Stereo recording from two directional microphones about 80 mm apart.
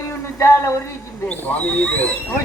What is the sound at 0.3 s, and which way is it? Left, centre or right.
Speech, left.